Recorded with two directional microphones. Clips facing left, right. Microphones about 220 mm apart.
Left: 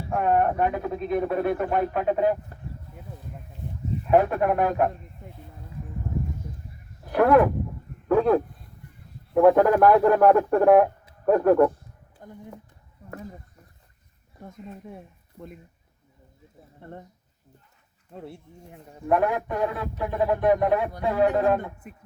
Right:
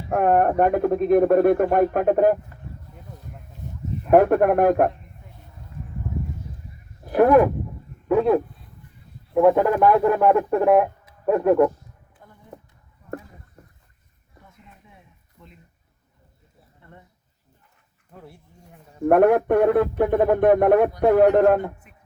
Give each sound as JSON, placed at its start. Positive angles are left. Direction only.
{"t": 0.1, "sound": "speech", "side_deg": -50}
{"t": 4.0, "sound": "speech", "side_deg": -50}
{"t": 7.1, "sound": "speech", "side_deg": -15}
{"t": 8.0, "sound": "a sound", "side_deg": -5}
{"t": 9.3, "sound": "speech", "side_deg": 0}
{"t": 12.2, "sound": "speech", "side_deg": 45}
{"t": 14.4, "sound": "speech", "side_deg": 50}
{"t": 16.8, "sound": "speech", "side_deg": 45}
{"t": 18.1, "sound": "speech", "side_deg": 25}
{"t": 19.0, "sound": "speech", "side_deg": -60}